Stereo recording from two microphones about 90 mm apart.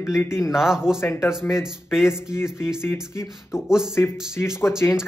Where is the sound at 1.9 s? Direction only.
5° right (ahead or behind).